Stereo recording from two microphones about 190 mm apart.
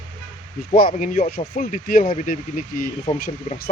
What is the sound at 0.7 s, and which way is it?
Speech, 50° left (ahead or behind).